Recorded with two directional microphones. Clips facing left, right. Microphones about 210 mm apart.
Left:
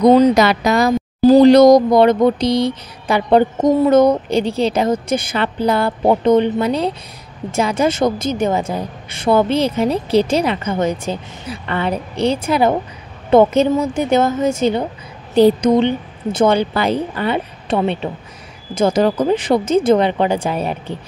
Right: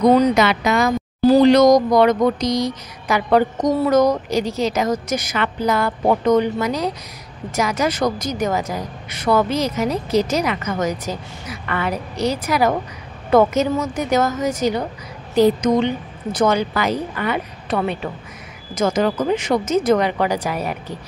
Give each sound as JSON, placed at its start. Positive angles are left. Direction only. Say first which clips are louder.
{"t": 0.0, "sound": "speech", "louder": "left 4 dB", "side_deg": 30}